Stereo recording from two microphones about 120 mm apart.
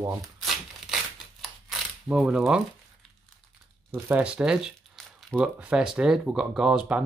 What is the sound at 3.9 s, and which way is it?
Speech, 15° right (ahead or behind).